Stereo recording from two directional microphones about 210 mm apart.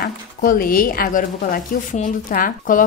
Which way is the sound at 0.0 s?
45° left (ahead or behind).